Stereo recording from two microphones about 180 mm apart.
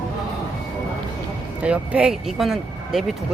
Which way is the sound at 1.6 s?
5° right (ahead or behind).